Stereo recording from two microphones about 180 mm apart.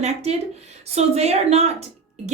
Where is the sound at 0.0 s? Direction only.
35° right (ahead or behind).